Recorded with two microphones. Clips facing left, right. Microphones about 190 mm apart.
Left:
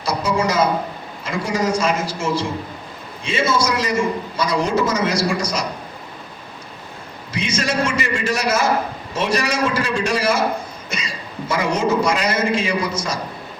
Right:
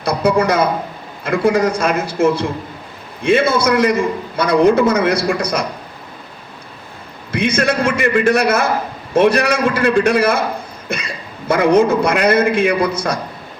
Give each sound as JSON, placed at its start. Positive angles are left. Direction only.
{"t": 0.0, "sound": "a man's voice", "side_deg": -60}
{"t": 7.3, "sound": "a man's voice", "side_deg": -60}